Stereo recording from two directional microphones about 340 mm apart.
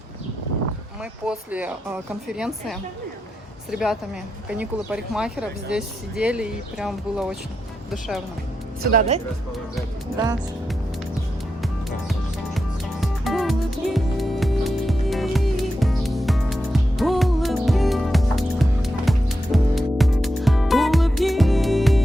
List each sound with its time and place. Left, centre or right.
1.3 s speech: centre
8.8 s speech: right
11.6 s music: centre